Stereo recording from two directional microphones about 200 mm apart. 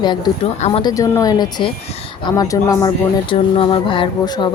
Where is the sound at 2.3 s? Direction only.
20° left (ahead or behind).